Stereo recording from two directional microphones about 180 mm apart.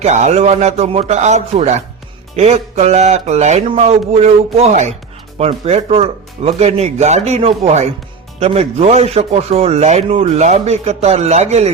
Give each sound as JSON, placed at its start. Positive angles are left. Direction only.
{"t": 0.0, "sound": "speech", "side_deg": -40}